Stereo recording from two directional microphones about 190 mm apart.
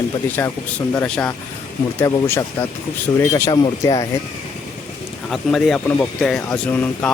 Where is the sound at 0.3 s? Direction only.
10° left (ahead or behind).